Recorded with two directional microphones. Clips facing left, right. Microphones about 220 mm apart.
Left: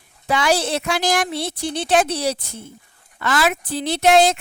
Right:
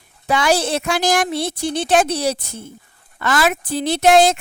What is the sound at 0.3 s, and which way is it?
Speech, 45° right (ahead or behind).